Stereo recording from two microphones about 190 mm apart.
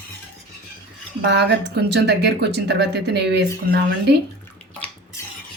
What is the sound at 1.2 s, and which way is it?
Speech, 65° right (ahead or behind).